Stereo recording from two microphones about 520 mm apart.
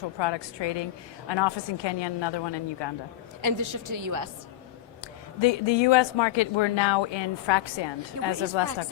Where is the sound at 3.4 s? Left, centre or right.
Right.